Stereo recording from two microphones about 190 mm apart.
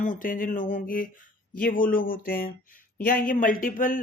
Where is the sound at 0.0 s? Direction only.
45° left (ahead or behind).